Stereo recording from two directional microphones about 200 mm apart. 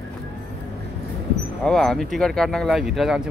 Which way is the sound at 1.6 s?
5° left (ahead or behind).